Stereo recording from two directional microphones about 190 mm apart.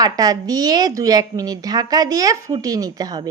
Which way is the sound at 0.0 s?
20° right (ahead or behind).